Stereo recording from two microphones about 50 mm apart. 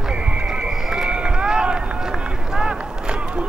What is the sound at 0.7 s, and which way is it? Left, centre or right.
Run, centre.